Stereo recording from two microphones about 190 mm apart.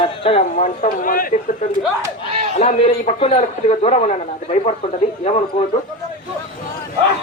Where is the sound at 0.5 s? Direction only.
45° left (ahead or behind).